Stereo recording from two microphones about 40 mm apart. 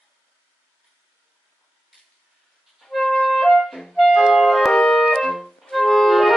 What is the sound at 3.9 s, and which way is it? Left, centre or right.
Clarinet, centre.